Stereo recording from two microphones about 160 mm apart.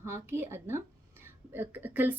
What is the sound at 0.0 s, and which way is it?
A woman's voice, 15° right (ahead or behind).